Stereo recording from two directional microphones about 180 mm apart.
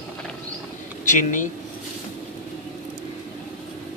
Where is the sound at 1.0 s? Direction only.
45° left (ahead or behind).